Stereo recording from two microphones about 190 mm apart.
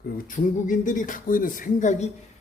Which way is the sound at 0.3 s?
45° left (ahead or behind).